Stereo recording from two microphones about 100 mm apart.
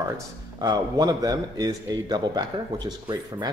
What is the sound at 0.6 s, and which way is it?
A man's voice, 40° right (ahead or behind).